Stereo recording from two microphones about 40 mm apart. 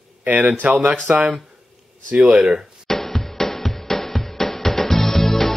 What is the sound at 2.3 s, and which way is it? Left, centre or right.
Speech, centre.